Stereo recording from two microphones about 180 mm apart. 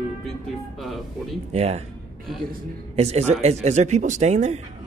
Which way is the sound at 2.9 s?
35° right (ahead or behind).